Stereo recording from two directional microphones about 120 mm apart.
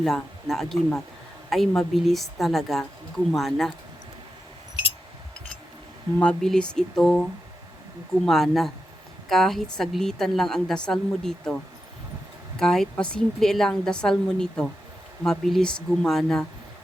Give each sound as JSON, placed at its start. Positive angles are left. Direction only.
{"t": 0.0, "sound": "a woman's voice", "side_deg": 5}
{"t": 6.1, "sound": "a woman's voice", "side_deg": 5}